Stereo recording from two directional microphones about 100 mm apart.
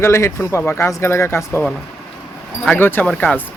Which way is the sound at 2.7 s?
20° left (ahead or behind).